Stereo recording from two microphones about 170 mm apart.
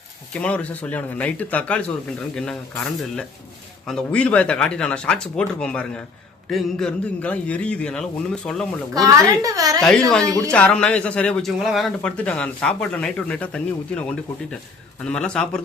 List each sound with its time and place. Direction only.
0.3 s a man's voice: 10° left (ahead or behind)
9.0 s a woman's voice: 20° right (ahead or behind)
10.1 s a man's voice: 5° left (ahead or behind)
15.0 s speech: 5° left (ahead or behind)